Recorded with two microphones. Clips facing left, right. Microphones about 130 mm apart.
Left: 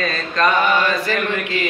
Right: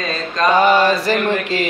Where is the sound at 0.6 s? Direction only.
35° right (ahead or behind).